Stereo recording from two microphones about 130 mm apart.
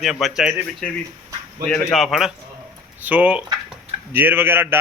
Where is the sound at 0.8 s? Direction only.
10° left (ahead or behind).